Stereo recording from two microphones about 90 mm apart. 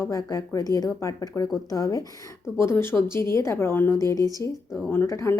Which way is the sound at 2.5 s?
30° left (ahead or behind).